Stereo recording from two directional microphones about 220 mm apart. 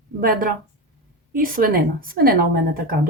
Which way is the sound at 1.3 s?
40° right (ahead or behind).